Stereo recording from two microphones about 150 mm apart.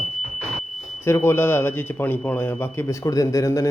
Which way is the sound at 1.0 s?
15° left (ahead or behind).